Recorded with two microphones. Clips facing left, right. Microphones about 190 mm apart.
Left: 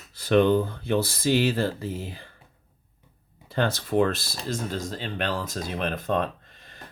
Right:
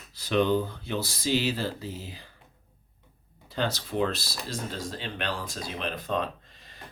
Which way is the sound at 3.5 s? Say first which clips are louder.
Left 6 dB; 50° left (ahead or behind).